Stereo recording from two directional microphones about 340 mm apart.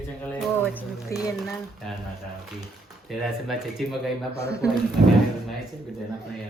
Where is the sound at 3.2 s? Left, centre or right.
Centre.